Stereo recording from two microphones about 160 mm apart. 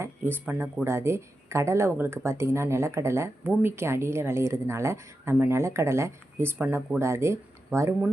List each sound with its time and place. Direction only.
0.0 s speech: 15° right (ahead or behind)